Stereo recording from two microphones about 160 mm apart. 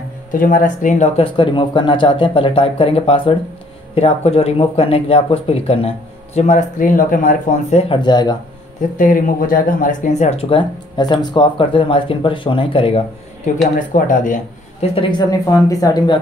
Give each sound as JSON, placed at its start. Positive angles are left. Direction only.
{"t": 0.3, "sound": "speech", "side_deg": 60}
{"t": 7.7, "sound": "speech", "side_deg": 30}
{"t": 8.9, "sound": "speech", "side_deg": 55}
{"t": 10.5, "sound": "speech", "side_deg": 25}
{"t": 13.7, "sound": "speech", "side_deg": 55}
{"t": 15.0, "sound": "speech", "side_deg": 30}